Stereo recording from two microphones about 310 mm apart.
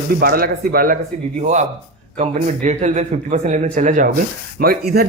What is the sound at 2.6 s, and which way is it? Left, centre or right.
Speech, right.